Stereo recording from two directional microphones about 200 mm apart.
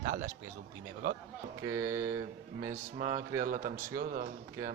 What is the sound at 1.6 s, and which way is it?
Speech, 15° right (ahead or behind).